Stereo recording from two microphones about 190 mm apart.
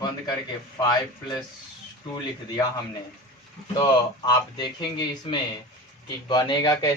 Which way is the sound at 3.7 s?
25° left (ahead or behind).